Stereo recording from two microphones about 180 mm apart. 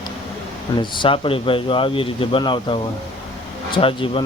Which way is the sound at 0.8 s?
30° left (ahead or behind).